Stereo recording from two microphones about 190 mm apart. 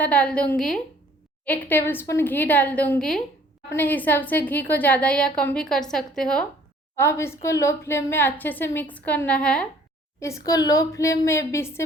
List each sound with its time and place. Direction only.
0.0 s a woman's voice: 5° left (ahead or behind)
10.2 s a woman's voice: 15° left (ahead or behind)